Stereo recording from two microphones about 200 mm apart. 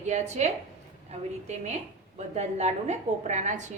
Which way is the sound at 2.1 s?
35° right (ahead or behind).